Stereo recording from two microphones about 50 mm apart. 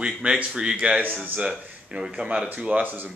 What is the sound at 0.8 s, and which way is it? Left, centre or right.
Speech, right.